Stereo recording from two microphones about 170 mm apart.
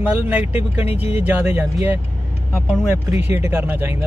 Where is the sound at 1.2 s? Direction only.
10° right (ahead or behind).